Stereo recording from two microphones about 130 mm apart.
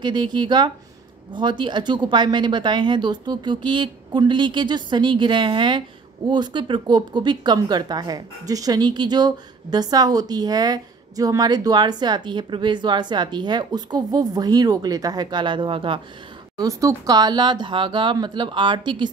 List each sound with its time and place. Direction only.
0.0 s speech: 35° right (ahead or behind)
16.5 s speech: 25° right (ahead or behind)